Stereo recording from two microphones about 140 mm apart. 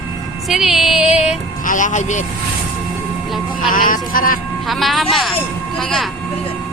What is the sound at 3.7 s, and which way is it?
Speech, 75° left (ahead or behind).